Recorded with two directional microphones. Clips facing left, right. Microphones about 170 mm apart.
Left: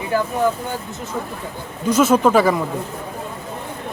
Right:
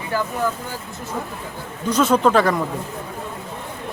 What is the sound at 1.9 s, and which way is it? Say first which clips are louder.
Speech: left 2 dB; 5° left (ahead or behind).